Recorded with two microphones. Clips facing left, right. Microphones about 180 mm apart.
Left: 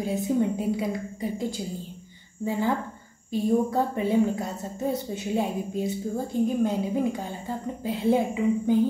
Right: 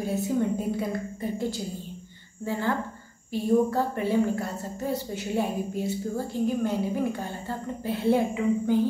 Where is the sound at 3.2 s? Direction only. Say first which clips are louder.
Right 1 dB; 20° left (ahead or behind).